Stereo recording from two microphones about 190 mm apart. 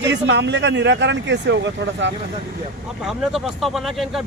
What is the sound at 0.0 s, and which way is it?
Speech, 65° right (ahead or behind).